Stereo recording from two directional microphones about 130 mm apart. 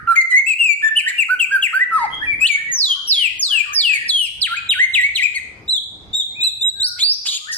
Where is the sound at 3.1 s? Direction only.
50° left (ahead or behind).